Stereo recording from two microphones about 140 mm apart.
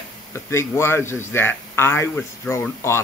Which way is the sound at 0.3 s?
20° left (ahead or behind).